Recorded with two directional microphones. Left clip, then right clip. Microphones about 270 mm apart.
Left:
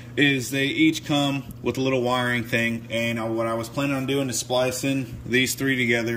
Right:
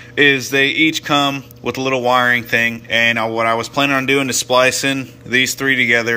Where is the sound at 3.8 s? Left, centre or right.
Right.